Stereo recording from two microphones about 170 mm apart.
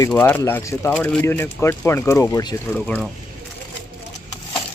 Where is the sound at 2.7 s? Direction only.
10° left (ahead or behind).